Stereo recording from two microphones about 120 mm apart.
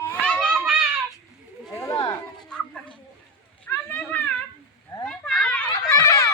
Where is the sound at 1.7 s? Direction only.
30° left (ahead or behind).